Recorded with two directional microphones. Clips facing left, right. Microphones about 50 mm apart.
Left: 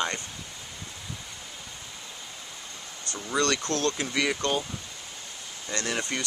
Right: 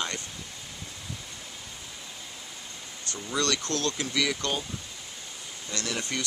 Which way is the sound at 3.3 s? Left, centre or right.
Centre.